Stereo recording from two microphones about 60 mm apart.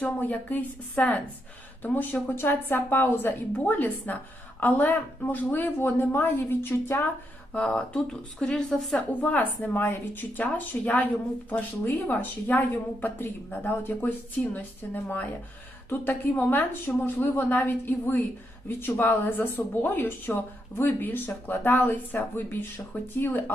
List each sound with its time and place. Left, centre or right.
0.0 s a woman's voice: left
7.5 s speech: centre
9.2 s a woman's voice: left